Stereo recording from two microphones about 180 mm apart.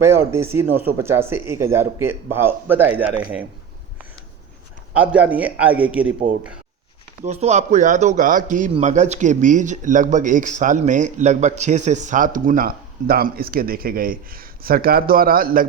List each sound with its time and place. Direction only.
0.0 s speech: 15° right (ahead or behind)
4.9 s speech: 5° right (ahead or behind)
7.2 s speech: 35° right (ahead or behind); by 15.6 s 55° right (ahead or behind)